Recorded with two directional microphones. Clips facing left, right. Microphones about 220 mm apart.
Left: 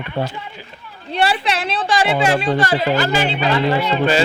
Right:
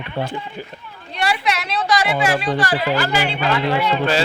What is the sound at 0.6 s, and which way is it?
Speech, 50° right (ahead or behind).